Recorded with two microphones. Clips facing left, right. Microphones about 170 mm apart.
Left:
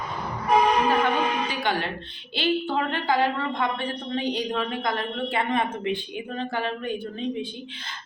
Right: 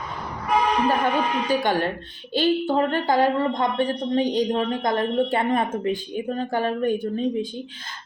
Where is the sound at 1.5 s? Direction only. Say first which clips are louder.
Right 5 dB; 45° right (ahead or behind).